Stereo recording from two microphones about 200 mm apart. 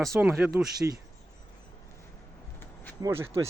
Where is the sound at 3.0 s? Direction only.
15° right (ahead or behind).